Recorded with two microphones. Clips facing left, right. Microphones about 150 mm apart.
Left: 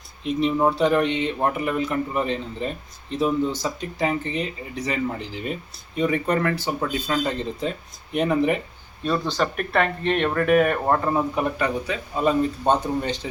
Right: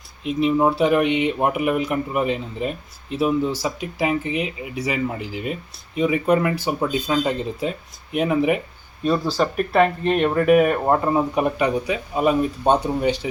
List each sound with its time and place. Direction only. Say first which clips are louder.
0.3 s speech: right 2 dB; 5° right (ahead or behind)